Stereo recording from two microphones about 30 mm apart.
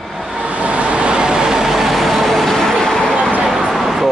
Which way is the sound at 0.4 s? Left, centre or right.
Right.